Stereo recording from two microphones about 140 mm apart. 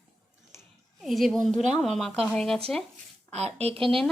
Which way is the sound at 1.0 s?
Centre (ahead or behind).